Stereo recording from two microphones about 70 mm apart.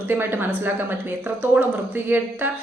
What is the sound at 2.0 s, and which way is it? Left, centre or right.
Speech, right.